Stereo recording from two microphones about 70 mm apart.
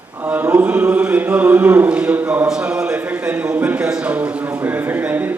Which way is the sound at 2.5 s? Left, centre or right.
Centre.